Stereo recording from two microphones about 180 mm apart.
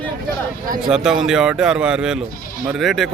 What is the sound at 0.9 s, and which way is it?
A man's voice, 5° right (ahead or behind).